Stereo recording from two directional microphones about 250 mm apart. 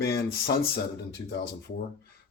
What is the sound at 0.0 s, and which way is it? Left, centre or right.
Speech, left.